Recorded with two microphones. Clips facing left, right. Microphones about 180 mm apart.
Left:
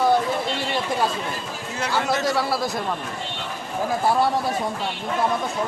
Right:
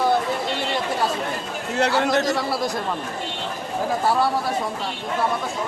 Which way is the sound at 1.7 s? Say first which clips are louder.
Right 4 dB; 65° right (ahead or behind).